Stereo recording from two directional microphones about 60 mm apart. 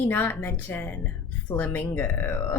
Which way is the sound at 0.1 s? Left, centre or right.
Left.